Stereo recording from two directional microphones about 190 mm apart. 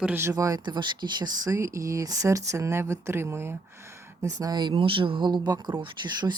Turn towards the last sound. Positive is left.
turn(degrees=-25)  # may be behind; listen again after turning